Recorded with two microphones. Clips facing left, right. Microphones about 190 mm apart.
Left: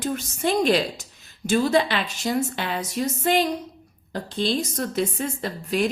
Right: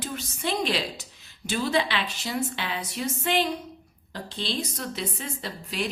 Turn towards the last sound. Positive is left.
turn(degrees=50)  # may be behind; listen again after turning